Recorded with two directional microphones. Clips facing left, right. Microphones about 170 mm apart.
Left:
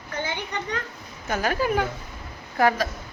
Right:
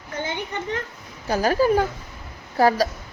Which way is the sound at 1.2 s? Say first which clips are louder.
Right 5 dB; 35° right (ahead or behind).